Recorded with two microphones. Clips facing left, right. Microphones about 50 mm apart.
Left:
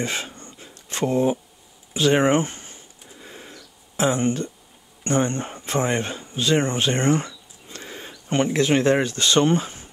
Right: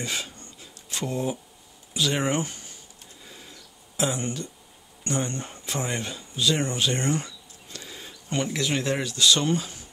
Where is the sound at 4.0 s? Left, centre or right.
Left.